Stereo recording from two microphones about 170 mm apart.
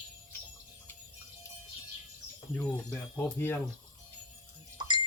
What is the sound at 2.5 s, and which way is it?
Speech, 10° left (ahead or behind).